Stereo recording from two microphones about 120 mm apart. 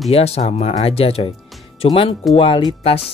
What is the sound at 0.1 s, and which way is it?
Speech, 60° left (ahead or behind).